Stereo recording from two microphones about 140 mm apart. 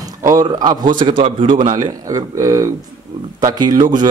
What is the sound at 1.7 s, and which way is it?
Speech, 25° right (ahead or behind).